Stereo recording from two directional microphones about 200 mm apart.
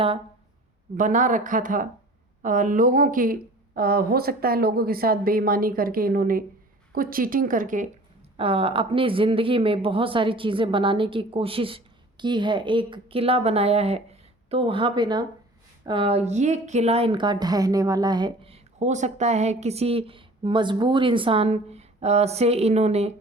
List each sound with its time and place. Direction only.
0.9 s speech: 40° right (ahead or behind)
8.4 s speech: 30° right (ahead or behind)